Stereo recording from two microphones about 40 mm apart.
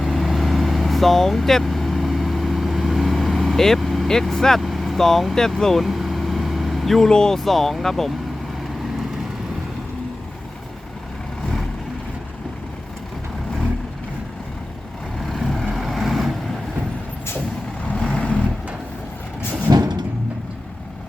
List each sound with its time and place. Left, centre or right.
0.0 s vehicle: centre
4.1 s speech: centre
5.8 s vehicle: centre
7.1 s speech: centre
7.3 s speech: centre
15.3 s vehicle: centre
17.9 s vehicle: left